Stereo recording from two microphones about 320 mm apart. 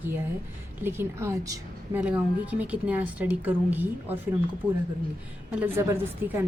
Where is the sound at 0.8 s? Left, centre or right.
Centre.